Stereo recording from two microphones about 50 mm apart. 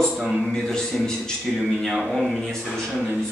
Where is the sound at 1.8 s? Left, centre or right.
Centre.